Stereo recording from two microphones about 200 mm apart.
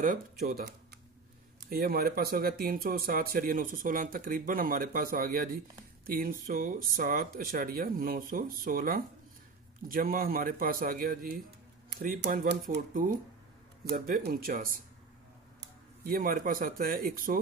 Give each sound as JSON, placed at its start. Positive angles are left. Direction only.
{"t": 0.0, "sound": "speech", "side_deg": -45}
{"t": 16.0, "sound": "speech", "side_deg": -45}